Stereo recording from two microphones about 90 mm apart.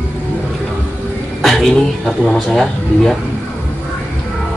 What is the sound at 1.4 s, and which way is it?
Speech, centre (ahead or behind).